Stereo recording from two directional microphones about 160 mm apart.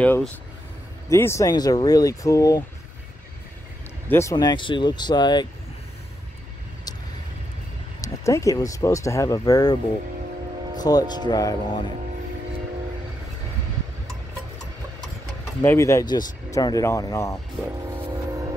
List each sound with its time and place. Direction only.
0.0 s speech: 10° left (ahead or behind)
4.1 s speech: 20° left (ahead or behind)
8.0 s speech: 20° left (ahead or behind)
10.8 s speech: 25° left (ahead or behind)
15.6 s speech: 15° left (ahead or behind)
17.6 s speech: 5° right (ahead or behind)